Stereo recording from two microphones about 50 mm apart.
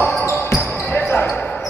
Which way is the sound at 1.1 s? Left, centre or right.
Left.